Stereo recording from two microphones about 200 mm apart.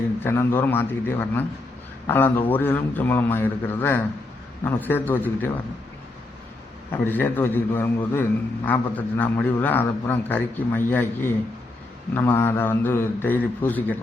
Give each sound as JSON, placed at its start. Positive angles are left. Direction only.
{"t": 0.2, "sound": "a man's voice", "side_deg": 10}
{"t": 6.9, "sound": "a man's voice", "side_deg": 10}